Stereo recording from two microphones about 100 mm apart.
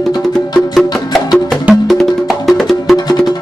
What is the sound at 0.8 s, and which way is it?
Music, centre (ahead or behind).